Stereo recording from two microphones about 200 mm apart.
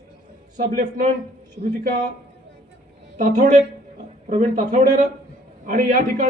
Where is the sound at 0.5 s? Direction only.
35° right (ahead or behind).